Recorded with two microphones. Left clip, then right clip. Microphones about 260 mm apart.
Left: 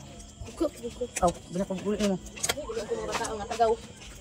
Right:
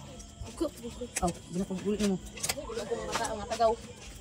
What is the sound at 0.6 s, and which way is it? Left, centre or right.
Speech, left.